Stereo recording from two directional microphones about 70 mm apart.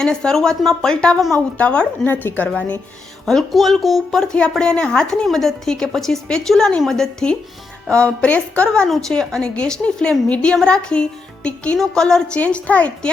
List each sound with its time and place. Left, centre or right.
0.0 s a woman's voice: centre
3.2 s a woman's voice: centre